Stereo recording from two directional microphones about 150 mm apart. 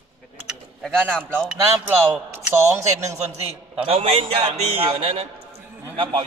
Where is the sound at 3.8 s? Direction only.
40° right (ahead or behind).